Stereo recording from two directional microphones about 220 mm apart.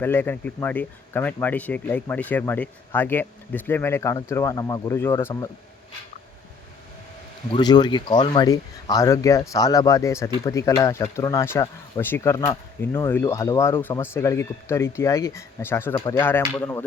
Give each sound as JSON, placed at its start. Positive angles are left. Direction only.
{"t": 0.0, "sound": "speech", "side_deg": 10}
{"t": 7.5, "sound": "speech", "side_deg": 20}